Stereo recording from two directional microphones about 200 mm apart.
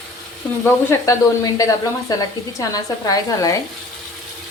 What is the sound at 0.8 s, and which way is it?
Speech, 15° left (ahead or behind).